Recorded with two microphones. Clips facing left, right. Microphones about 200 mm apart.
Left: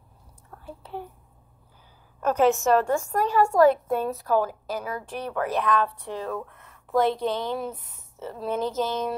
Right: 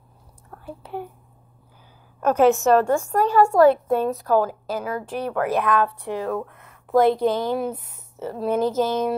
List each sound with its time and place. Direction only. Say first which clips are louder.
2.1 s a woman's voice: right 4 dB; 50° right (ahead or behind)